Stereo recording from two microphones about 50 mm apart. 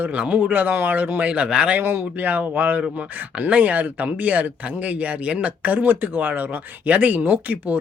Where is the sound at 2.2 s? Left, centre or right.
Right.